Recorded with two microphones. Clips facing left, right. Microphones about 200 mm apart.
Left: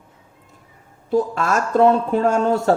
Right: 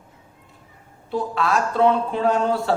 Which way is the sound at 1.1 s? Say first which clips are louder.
Left 3 dB; 45° left (ahead or behind).